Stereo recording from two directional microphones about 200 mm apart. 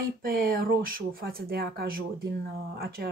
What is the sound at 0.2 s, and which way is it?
Speech, 50° right (ahead or behind).